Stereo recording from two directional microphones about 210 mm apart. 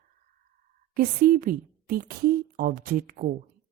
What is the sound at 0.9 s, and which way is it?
Speech, 45° right (ahead or behind).